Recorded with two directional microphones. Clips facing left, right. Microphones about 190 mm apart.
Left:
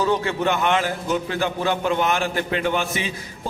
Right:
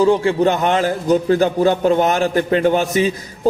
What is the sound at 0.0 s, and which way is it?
A man's voice, 30° right (ahead or behind).